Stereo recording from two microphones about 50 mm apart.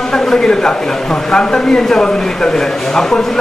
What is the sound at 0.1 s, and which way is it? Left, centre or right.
Speech, centre.